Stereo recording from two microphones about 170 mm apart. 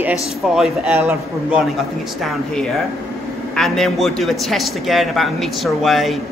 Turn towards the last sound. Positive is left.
turn(degrees=0)  # may be behind; listen again after turning